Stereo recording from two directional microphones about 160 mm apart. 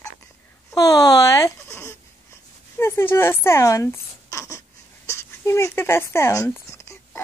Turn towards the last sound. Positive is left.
turn(degrees=15)  # may be behind; listen again after turning